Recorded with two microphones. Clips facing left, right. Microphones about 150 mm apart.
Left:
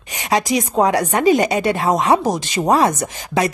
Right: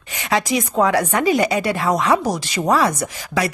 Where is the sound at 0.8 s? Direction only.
25° left (ahead or behind).